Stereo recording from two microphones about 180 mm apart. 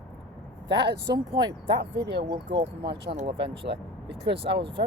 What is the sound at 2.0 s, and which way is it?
Speech, 65° right (ahead or behind).